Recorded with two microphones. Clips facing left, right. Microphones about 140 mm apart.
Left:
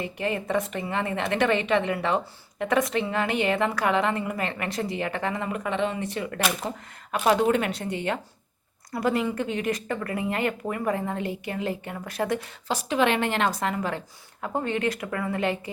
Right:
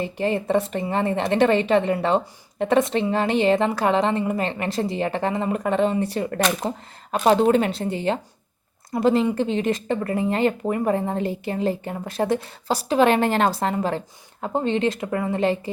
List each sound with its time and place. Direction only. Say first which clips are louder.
0.0 s speech: right 5 dB; 30° right (ahead or behind)